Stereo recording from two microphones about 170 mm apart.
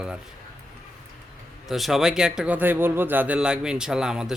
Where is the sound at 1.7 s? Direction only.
Centre (ahead or behind).